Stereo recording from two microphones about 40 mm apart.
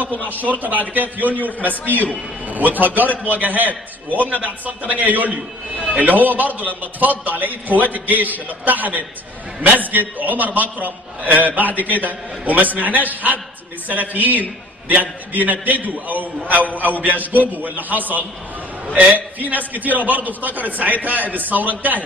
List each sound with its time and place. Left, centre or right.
0.4 s a man's voice: right
2.4 s a man's voice: right